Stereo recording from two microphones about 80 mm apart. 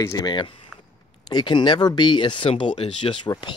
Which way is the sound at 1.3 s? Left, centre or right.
Left.